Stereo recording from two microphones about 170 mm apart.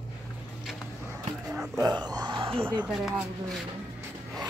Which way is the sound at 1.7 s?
25° right (ahead or behind).